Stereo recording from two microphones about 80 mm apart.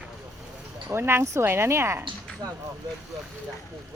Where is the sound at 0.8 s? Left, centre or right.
Right.